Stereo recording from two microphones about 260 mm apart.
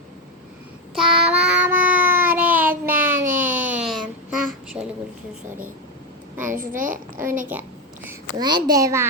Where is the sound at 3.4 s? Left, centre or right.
Centre.